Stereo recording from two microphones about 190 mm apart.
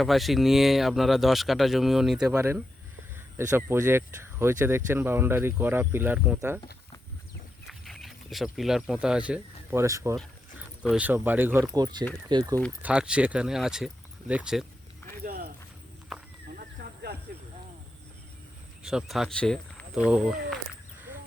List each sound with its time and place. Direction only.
0.0 s speech: centre (ahead or behind)
2.3 s speech: 15° right (ahead or behind)
7.7 s speech: centre (ahead or behind); by 12.5 s 20° right (ahead or behind)
12.8 s speech: 5° right (ahead or behind)
15.2 s a sound: 50° right (ahead or behind)
16.6 s a sound: 55° right (ahead or behind)
18.8 s speech: centre (ahead or behind)